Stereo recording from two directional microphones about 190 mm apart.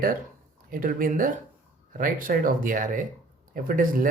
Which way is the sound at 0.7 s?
50° right (ahead or behind).